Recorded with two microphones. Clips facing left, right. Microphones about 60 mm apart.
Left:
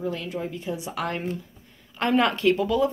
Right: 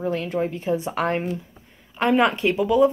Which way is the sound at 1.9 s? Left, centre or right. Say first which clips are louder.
Right 3 dB; centre.